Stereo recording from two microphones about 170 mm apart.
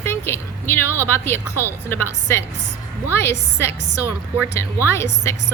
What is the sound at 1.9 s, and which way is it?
A woman's voice, 15° left (ahead or behind).